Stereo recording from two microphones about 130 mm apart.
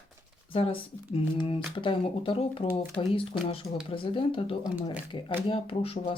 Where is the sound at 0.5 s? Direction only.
45° left (ahead or behind).